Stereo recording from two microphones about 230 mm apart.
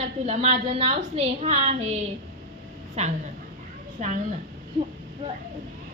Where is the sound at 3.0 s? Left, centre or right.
Right.